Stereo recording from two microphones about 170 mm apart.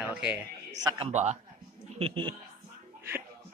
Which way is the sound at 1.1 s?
40° right (ahead or behind).